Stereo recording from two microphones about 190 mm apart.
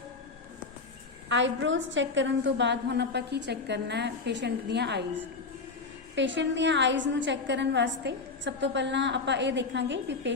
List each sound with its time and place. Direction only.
1.3 s a woman's voice: 75° right (ahead or behind)
6.1 s a woman's voice: 70° right (ahead or behind)